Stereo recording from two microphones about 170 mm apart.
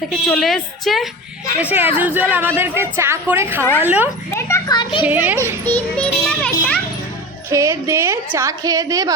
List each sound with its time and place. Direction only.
0.1 s a woman's voice: centre (ahead or behind)
1.7 s a woman's voice: 10° right (ahead or behind)
4.4 s a child's voice: 15° left (ahead or behind)
4.8 s a child's voice: 30° left (ahead or behind)
5.0 s a woman's voice: 10° right (ahead or behind)
5.6 s a child's voice: 10° left (ahead or behind)
7.5 s a woman's voice: 15° right (ahead or behind)